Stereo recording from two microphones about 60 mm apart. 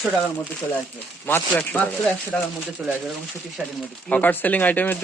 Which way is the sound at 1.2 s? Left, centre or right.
Left.